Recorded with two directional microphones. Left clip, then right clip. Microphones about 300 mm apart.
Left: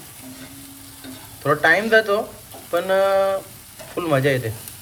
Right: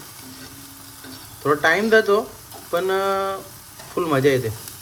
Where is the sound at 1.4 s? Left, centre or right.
Right.